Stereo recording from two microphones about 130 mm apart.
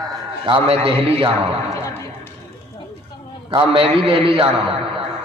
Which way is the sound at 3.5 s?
40° right (ahead or behind).